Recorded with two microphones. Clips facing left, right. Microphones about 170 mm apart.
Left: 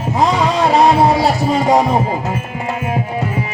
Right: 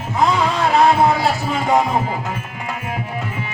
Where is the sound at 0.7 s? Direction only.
35° left (ahead or behind).